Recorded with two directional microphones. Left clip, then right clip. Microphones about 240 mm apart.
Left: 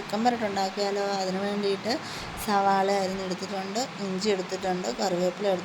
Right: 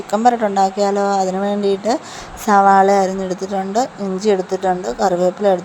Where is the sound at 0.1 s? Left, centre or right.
Right.